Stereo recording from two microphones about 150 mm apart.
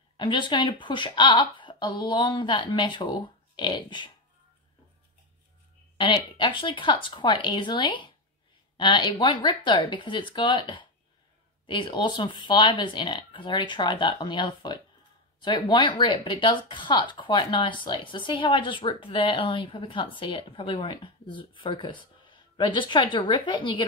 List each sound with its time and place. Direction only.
0.2 s speech: 30° left (ahead or behind)
5.9 s speech: 30° left (ahead or behind)